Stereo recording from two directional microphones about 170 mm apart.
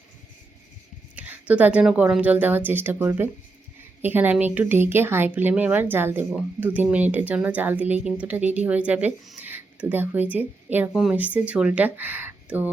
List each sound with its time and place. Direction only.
1.1 s speech: 10° right (ahead or behind)